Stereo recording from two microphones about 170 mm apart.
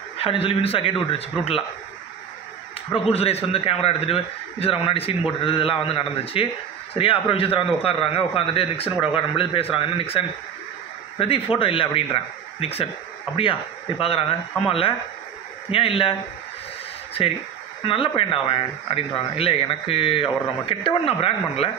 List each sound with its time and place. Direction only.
0.2 s a man's voice: 35° left (ahead or behind)
2.9 s a man's voice: 35° left (ahead or behind)
17.8 s a man's voice: 30° left (ahead or behind)